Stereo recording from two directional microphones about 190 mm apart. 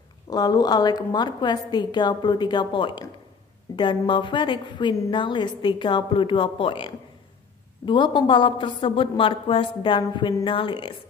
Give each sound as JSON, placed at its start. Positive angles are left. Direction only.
{"t": 0.3, "sound": "a woman's voice", "side_deg": 20}